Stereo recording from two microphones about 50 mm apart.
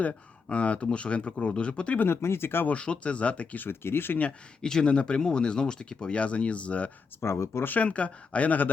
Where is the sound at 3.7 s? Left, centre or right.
Left.